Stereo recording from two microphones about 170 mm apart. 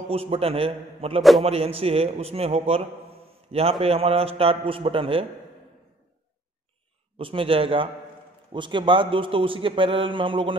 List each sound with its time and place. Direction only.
0.1 s speech: 35° right (ahead or behind)
7.2 s a man's voice: 30° right (ahead or behind)